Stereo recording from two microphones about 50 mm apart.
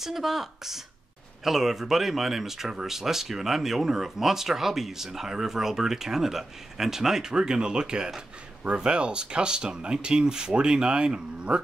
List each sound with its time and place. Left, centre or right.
0.0 s speech: centre